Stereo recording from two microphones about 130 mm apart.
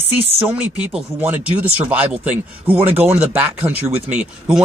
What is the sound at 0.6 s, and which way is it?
Speech, 10° right (ahead or behind).